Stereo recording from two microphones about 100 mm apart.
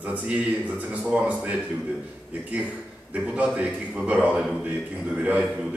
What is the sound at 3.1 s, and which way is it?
Speech, 15° right (ahead or behind).